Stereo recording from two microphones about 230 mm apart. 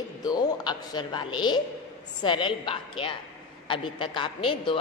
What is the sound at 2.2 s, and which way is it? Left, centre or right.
A man's voice, left.